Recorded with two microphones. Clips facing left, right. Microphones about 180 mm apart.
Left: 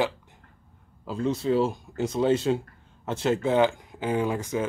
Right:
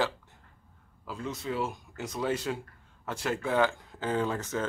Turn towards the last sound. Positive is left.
turn(degrees=15)  # may be behind; listen again after turning